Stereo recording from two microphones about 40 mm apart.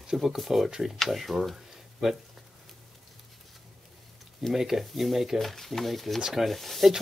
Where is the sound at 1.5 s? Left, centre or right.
Centre.